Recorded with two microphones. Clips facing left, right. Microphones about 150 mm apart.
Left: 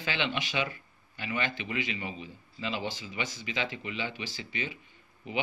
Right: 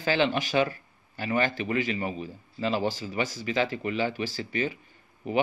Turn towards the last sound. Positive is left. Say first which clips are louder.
# right 7 dB
turn(degrees=-45)  # may be behind; listen again after turning